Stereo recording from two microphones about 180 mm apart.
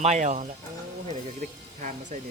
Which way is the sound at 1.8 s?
45° right (ahead or behind).